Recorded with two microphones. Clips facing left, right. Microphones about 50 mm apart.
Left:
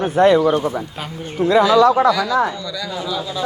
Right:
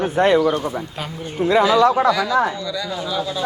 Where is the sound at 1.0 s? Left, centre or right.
Centre.